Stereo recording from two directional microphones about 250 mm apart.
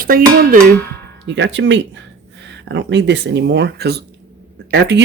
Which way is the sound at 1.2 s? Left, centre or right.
Right.